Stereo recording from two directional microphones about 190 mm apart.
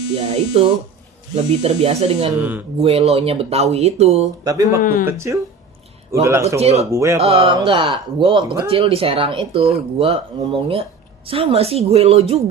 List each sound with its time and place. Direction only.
0.2 s speech: 35° right (ahead or behind)
1.8 s speech: 35° right (ahead or behind)
2.4 s speech: 10° right (ahead or behind)
2.7 s speech: 30° right (ahead or behind)
4.4 s speech: 15° right (ahead or behind)
4.8 s speech: 45° left (ahead or behind)
5.0 s speech: 15° right (ahead or behind)
6.6 s speech: 35° right (ahead or behind)
6.9 s speech: 15° right (ahead or behind)
7.2 s speech: 30° right (ahead or behind)